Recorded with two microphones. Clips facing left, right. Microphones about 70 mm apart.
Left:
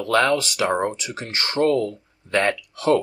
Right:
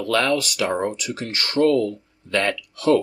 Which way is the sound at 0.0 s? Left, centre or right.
Left.